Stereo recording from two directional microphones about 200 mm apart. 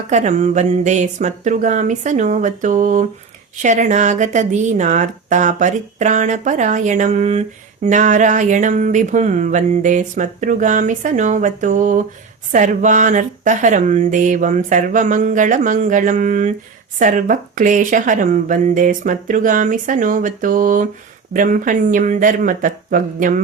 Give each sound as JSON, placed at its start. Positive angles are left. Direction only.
{"t": 0.1, "sound": "speech", "side_deg": -35}